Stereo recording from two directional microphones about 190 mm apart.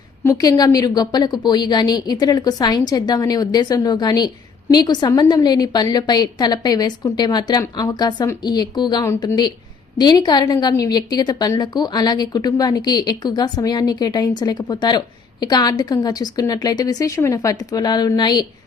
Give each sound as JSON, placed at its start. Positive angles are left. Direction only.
{"t": 0.3, "sound": "a woman's voice", "side_deg": 20}